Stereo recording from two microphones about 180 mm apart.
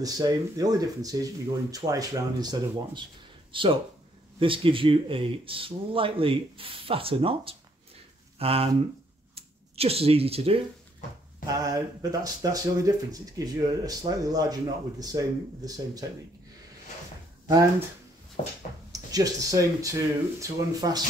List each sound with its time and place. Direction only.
0.0 s speech: 20° right (ahead or behind)
11.4 s speech: 20° right (ahead or behind)
17.5 s speech: 20° right (ahead or behind)
18.9 s speech: 20° right (ahead or behind)